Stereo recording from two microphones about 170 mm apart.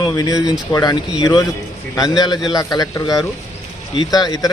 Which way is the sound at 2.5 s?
20° left (ahead or behind).